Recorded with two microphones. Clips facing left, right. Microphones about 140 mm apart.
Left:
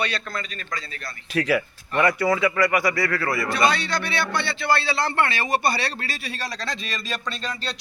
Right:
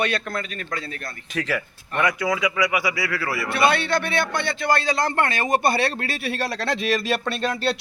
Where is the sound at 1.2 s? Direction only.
5° left (ahead or behind).